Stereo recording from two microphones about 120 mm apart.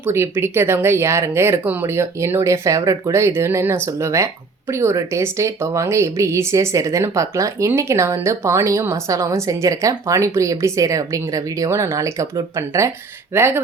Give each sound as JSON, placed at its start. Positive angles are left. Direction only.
{"t": 0.0, "sound": "speech", "side_deg": -20}